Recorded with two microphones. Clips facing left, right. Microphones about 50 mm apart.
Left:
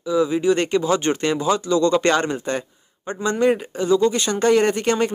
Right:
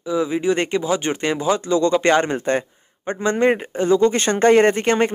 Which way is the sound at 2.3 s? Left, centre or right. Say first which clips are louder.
Right 4 dB; right.